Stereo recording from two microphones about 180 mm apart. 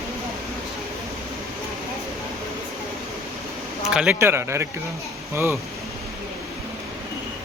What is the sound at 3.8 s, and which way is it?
A man's voice, 5° right (ahead or behind).